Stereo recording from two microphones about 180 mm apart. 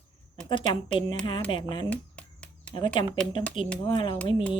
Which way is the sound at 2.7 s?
25° left (ahead or behind).